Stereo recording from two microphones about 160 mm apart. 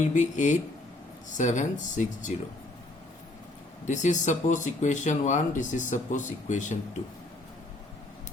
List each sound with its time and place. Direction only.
0.1 s speech: 50° left (ahead or behind)
3.8 s speech: 50° left (ahead or behind)